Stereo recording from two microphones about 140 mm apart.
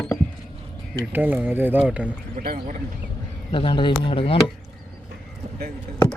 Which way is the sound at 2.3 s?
75° right (ahead or behind).